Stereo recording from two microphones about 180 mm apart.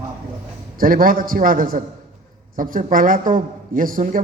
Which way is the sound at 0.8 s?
50° right (ahead or behind).